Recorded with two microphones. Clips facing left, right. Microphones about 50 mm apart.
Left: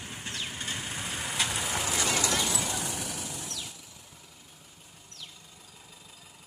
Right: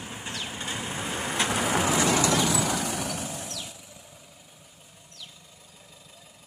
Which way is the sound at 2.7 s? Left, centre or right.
Right.